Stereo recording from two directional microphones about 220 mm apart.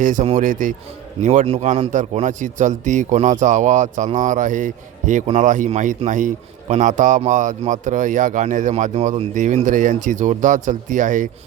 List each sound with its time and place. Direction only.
0.0 s a man's voice: 35° right (ahead or behind)